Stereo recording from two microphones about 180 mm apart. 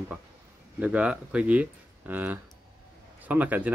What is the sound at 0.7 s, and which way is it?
Speech, 5° right (ahead or behind).